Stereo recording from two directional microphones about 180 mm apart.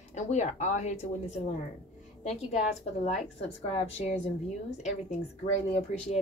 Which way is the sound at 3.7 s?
35° left (ahead or behind).